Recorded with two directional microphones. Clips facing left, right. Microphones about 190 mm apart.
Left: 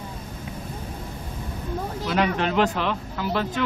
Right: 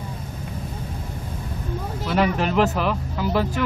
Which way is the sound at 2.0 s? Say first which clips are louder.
Right 2 dB; 5° right (ahead or behind).